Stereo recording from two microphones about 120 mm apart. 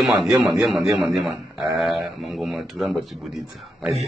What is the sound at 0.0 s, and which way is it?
A man's voice, centre (ahead or behind).